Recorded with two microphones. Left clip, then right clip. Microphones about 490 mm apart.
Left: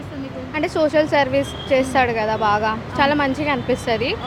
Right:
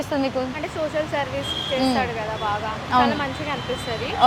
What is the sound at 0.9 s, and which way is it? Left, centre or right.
Speech, left.